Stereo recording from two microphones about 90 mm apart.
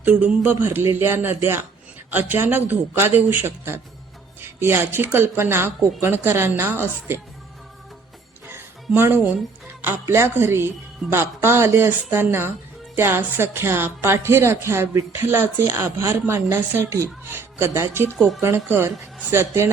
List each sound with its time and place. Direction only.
0.0 s a woman's voice: 20° right (ahead or behind)
9.0 s a woman's voice: 25° right (ahead or behind)